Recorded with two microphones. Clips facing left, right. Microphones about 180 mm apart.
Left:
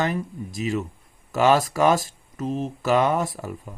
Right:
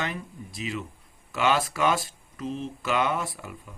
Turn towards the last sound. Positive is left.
turn(degrees=40)  # may be behind; listen again after turning